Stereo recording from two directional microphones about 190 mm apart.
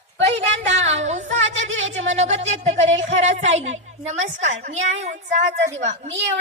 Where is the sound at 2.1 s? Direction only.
35° right (ahead or behind).